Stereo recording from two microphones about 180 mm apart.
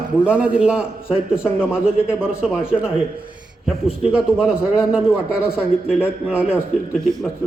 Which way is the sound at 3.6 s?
Centre (ahead or behind).